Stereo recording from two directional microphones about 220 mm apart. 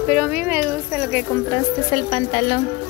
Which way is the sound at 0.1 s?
5° right (ahead or behind).